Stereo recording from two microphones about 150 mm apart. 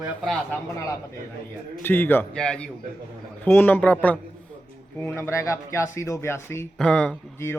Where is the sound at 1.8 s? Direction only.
15° left (ahead or behind).